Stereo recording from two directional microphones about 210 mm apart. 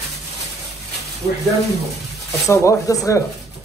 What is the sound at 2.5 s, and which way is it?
Speech, 15° left (ahead or behind).